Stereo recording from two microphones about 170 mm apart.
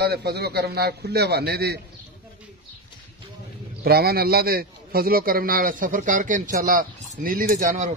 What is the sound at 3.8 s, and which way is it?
A man's voice, 65° right (ahead or behind).